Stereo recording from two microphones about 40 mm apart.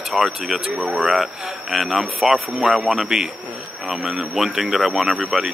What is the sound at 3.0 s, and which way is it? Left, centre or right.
Speech, centre.